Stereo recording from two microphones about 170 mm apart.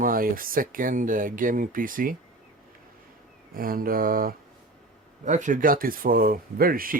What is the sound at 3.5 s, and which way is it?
Speech, 55° right (ahead or behind).